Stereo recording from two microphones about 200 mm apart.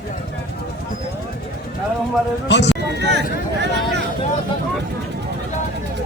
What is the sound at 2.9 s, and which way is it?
Speech, 60° right (ahead or behind).